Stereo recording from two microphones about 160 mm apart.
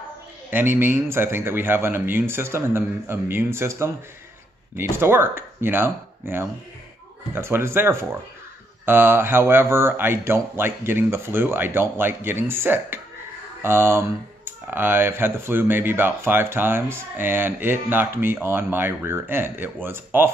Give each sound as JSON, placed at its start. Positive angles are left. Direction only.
{"t": 0.5, "sound": "speech", "side_deg": -15}